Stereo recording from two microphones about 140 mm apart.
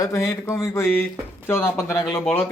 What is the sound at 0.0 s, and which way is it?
Speech, 25° left (ahead or behind).